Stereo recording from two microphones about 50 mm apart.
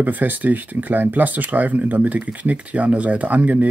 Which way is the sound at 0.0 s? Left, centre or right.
Right.